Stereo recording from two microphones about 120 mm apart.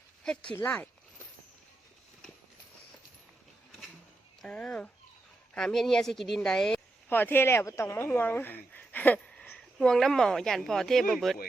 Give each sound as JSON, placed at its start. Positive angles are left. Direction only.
{"t": 0.5, "sound": "speech", "side_deg": 15}
{"t": 4.4, "sound": "speech", "side_deg": 10}
{"t": 7.1, "sound": "speech", "side_deg": 15}